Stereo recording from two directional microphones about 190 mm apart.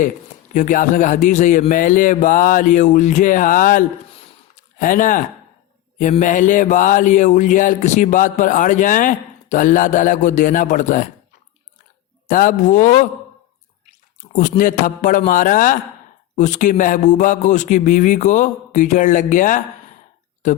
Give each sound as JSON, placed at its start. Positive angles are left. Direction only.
{"t": 0.5, "sound": "a man's voice", "side_deg": 40}
{"t": 6.0, "sound": "mantra", "side_deg": 40}
{"t": 12.3, "sound": "a man's voice", "side_deg": 45}
{"t": 14.6, "sound": "a man's voice", "side_deg": 45}
{"t": 16.3, "sound": "mantra", "side_deg": 40}
{"t": 20.4, "sound": "speech", "side_deg": 40}